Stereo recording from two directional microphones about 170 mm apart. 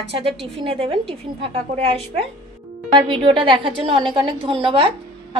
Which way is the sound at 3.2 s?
30° right (ahead or behind).